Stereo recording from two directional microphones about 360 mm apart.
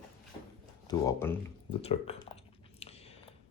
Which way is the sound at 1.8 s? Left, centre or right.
Centre.